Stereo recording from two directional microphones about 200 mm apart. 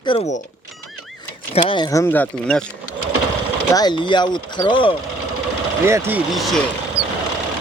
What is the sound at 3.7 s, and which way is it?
Speech, 20° left (ahead or behind).